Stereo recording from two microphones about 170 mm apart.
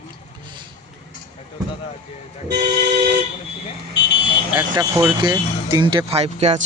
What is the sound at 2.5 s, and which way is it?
Vehicle, 85° right.